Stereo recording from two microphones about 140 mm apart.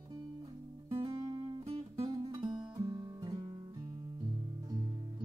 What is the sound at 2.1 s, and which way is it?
Music, 30° right (ahead or behind).